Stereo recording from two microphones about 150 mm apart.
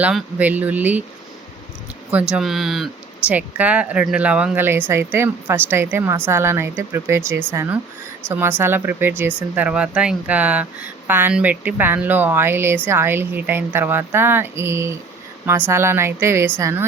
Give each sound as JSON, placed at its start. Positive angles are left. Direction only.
{"t": 0.0, "sound": "speech", "side_deg": -10}
{"t": 2.3, "sound": "a woman's voice", "side_deg": 0}